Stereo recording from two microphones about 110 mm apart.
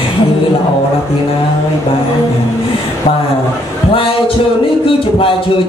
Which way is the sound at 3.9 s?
55° left (ahead or behind).